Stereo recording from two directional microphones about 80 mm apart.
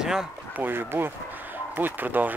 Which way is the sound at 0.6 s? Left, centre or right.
Right.